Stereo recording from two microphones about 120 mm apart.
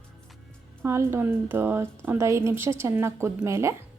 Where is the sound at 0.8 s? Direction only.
20° right (ahead or behind).